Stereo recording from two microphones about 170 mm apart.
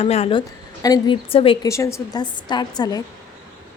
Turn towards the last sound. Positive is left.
turn(degrees=25)  # may be behind; listen again after turning